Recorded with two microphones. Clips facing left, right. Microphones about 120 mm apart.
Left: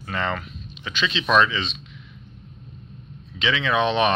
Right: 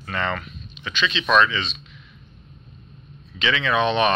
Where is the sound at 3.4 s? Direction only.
10° left (ahead or behind).